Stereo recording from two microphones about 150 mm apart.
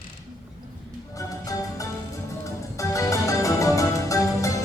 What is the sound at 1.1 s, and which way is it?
Music, 20° left (ahead or behind).